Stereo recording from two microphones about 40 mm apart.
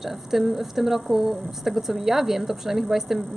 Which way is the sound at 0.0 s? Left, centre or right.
Centre.